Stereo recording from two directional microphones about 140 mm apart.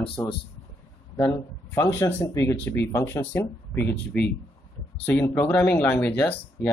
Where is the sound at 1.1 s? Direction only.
20° left (ahead or behind).